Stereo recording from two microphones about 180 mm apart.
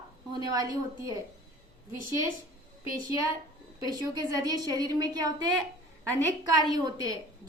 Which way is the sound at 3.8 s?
20° right (ahead or behind).